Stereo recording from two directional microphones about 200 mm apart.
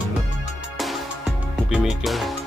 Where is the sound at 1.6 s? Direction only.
Centre (ahead or behind).